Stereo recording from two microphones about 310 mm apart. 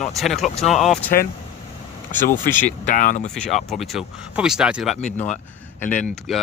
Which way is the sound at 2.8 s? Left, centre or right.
Left.